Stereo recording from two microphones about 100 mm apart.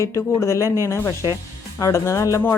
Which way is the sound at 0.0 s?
30° left (ahead or behind).